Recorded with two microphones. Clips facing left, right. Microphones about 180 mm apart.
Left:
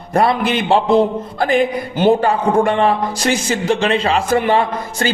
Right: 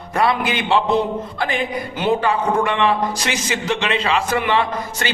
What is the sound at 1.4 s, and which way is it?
Speech, 45° left (ahead or behind).